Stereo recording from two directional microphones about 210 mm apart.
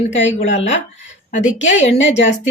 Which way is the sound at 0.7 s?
35° left (ahead or behind).